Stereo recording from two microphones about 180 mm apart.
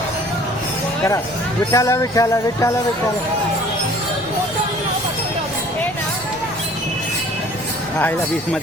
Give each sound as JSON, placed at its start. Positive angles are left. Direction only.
{"t": 1.7, "sound": "speech", "side_deg": 15}